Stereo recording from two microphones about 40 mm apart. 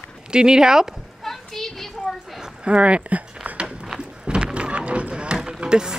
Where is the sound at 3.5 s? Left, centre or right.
Right.